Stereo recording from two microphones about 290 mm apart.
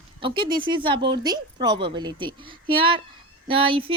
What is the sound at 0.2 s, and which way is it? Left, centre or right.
Speech, centre.